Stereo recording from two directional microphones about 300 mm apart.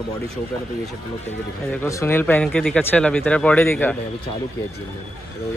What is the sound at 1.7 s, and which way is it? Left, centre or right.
A man's voice, centre.